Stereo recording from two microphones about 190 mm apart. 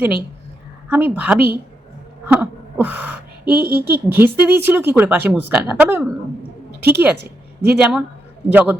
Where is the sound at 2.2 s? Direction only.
10° right (ahead or behind).